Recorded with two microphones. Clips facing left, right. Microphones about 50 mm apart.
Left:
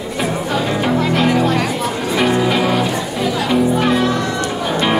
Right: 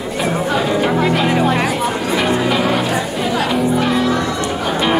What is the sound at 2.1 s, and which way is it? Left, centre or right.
Music, centre.